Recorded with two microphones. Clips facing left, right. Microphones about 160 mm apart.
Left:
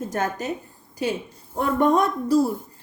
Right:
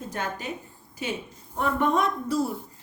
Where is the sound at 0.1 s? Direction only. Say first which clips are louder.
Left 5 dB; 45° left (ahead or behind).